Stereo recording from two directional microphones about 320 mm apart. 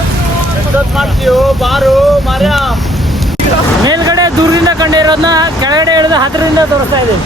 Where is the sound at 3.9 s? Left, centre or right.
Centre.